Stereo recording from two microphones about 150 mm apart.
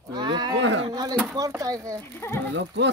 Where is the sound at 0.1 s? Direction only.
30° right (ahead or behind).